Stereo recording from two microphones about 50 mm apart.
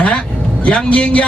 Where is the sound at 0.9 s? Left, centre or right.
Left.